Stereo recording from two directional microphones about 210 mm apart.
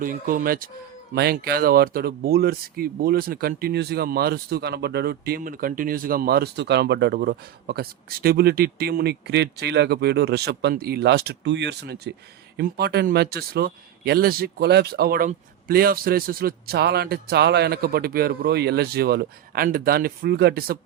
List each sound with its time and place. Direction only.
0.0 s speech: 40° right (ahead or behind)